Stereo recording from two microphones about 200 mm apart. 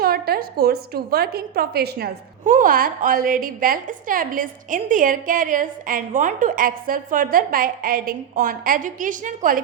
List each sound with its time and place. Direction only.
0.0 s a woman's voice: 50° right (ahead or behind)
2.4 s a woman's voice: 40° right (ahead or behind)